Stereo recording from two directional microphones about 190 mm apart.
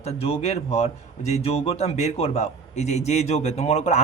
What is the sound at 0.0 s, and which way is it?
A man's voice, 35° left (ahead or behind).